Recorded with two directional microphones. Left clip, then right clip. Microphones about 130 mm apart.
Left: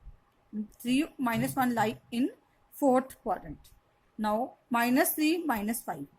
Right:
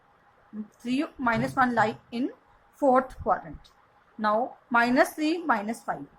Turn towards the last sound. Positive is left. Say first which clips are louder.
# right 5 dB
turn(degrees=55)  # may be behind; listen again after turning